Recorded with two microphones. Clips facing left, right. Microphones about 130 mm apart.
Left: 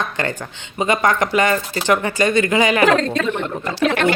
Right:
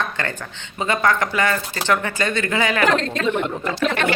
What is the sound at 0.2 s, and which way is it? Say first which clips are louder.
Speech: left 4 dB; 15° left (ahead or behind).